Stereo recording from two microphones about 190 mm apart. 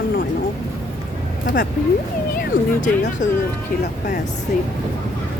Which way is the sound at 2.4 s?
50° left (ahead or behind).